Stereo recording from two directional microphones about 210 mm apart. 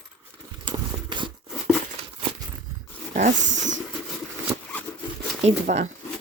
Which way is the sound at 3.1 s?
35° right (ahead or behind).